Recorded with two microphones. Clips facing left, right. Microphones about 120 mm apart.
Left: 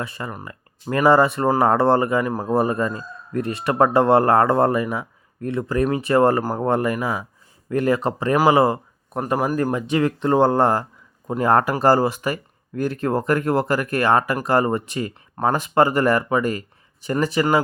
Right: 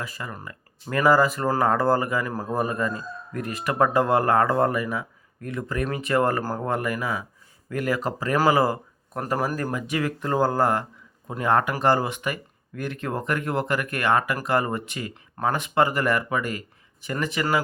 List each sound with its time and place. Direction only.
0.0 s speech: 25° left (ahead or behind)
2.5 s speech: 30° left (ahead or behind); by 9.7 s 15° left (ahead or behind)
9.7 s speech: 30° left (ahead or behind)